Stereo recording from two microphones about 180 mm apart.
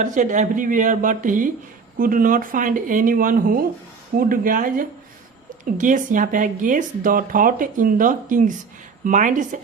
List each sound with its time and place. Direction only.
0.0 s speech: 45° right (ahead or behind)